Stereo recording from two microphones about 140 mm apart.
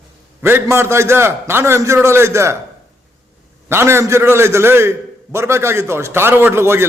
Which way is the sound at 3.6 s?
20° right (ahead or behind).